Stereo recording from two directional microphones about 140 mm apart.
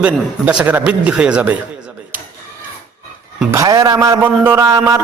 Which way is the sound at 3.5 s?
20° right (ahead or behind).